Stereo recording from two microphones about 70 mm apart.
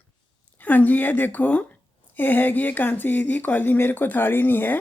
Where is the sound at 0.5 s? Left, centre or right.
Left.